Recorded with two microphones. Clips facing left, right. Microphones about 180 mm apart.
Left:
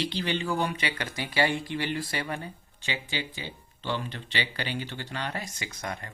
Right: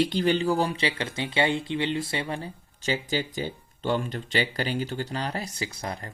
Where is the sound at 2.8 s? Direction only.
40° right (ahead or behind).